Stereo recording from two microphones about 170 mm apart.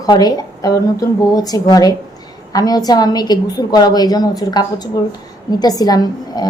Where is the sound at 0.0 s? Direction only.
25° left (ahead or behind).